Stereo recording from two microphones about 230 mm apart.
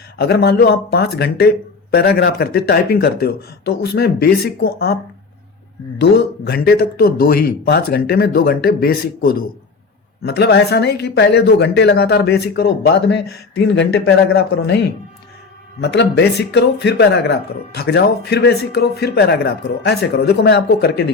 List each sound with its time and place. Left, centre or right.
0.2 s speech: left
6.0 s speech: left